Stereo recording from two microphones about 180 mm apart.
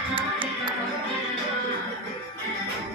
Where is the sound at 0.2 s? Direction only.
25° right (ahead or behind).